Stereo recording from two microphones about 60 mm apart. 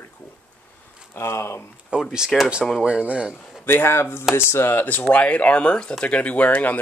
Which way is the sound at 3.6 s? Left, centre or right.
Left.